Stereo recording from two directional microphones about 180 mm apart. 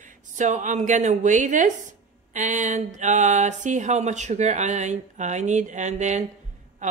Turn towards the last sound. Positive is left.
turn(degrees=-40)  # may be behind; listen again after turning